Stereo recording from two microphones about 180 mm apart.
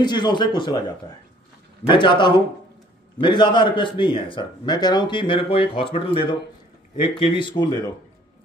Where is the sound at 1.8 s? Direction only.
25° left (ahead or behind).